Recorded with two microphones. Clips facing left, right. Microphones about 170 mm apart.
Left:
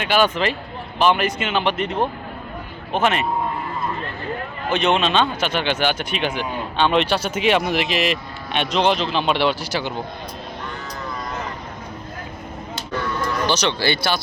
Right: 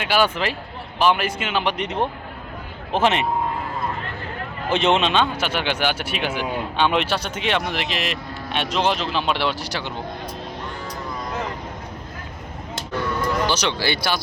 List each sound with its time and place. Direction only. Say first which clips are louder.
0.0 s a man's voice: left 2 dB; 10° right (ahead or behind); by 3.2 s 25° right (ahead or behind)
4.7 s speech: even; 25° right (ahead or behind)
5.1 s a man's voice: left 1 dB; 10° right (ahead or behind)
7.2 s speech: left 5 dB; 10° left (ahead or behind)
13.5 s a man's voice: left 2 dB; 10° right (ahead or behind)